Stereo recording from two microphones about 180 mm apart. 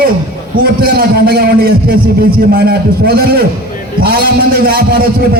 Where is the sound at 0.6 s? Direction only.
55° right (ahead or behind).